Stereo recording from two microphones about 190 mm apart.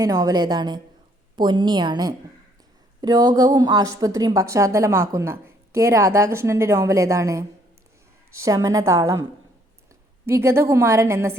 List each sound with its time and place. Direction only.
0.0 s a woman's voice: 20° right (ahead or behind)
10.2 s a woman's voice: 15° right (ahead or behind)